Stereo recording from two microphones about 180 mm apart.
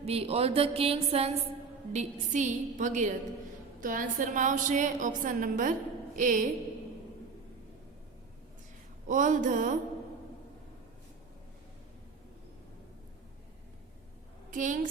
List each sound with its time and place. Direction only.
0.0 s a woman's voice: 35° right (ahead or behind)
9.0 s a woman's voice: 45° right (ahead or behind)
14.5 s a woman's voice: 45° right (ahead or behind)